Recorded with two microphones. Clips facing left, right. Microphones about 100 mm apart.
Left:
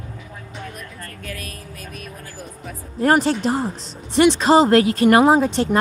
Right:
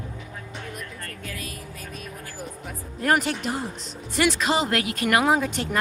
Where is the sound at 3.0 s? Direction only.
35° left (ahead or behind).